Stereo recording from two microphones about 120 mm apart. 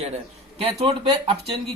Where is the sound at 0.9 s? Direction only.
45° right (ahead or behind).